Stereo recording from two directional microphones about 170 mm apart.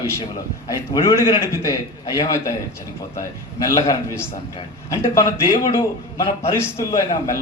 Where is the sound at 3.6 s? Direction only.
20° left (ahead or behind).